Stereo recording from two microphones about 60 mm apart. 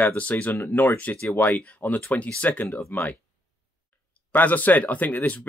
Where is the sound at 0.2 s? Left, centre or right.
Left.